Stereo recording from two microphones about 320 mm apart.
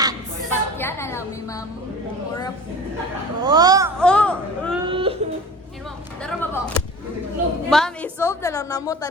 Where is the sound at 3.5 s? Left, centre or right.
Centre.